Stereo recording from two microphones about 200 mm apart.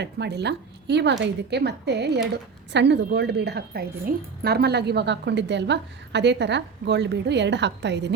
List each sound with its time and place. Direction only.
0.0 s a woman's voice: 55° right (ahead or behind)